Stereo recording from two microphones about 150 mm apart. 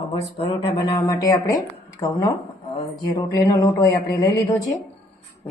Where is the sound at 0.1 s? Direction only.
40° left (ahead or behind).